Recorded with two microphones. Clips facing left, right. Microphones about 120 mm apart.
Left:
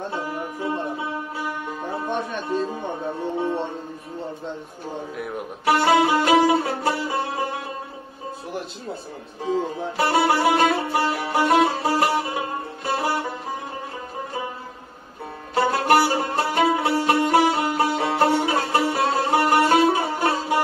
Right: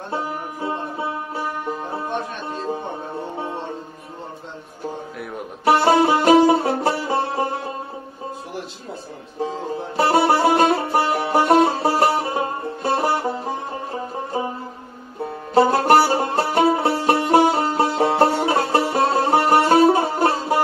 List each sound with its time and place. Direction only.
5.7 s music: 35° right (ahead or behind)
9.9 s music: 35° right (ahead or behind)
15.5 s music: 35° right (ahead or behind)